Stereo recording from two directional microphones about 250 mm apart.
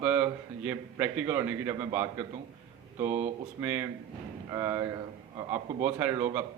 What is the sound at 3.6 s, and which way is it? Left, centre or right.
A man's voice, centre.